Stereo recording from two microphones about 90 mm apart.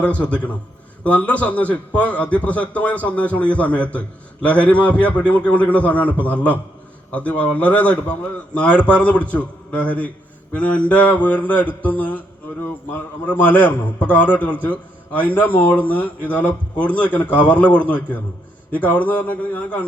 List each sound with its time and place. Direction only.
0.0 s a man's voice: 15° left (ahead or behind)